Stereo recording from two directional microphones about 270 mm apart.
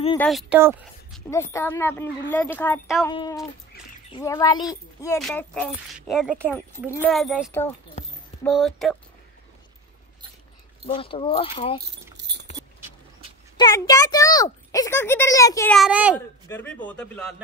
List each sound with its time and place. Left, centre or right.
0.2 s a man's voice: centre
1.3 s a man's voice: centre
8.0 s clip-clop: left
8.5 s a man's voice: centre
10.9 s speech: centre
12.2 s keys jangling: right
13.6 s speech: centre
16.2 s a man's voice: centre